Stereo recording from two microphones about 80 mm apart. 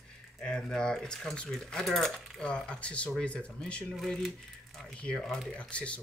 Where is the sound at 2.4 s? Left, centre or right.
Centre.